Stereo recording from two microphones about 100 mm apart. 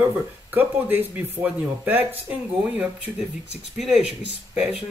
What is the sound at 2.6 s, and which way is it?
Speech, 10° right (ahead or behind).